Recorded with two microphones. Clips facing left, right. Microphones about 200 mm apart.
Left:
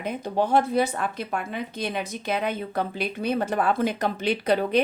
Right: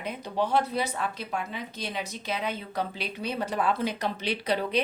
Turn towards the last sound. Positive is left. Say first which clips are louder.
# left 5 dB
turn(degrees=50)  # may be behind; listen again after turning